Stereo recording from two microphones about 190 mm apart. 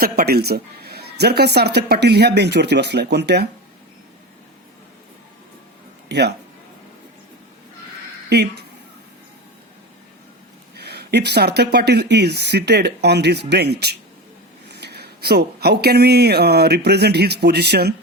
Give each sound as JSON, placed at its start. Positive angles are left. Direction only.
{"t": 0.0, "sound": "a woman's voice", "side_deg": -55}
{"t": 6.1, "sound": "speech", "side_deg": -60}
{"t": 8.3, "sound": "speech", "side_deg": -60}
{"t": 10.8, "sound": "a woman's voice", "side_deg": -60}